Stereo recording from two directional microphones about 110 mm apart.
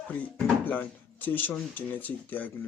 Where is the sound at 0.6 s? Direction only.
15° left (ahead or behind).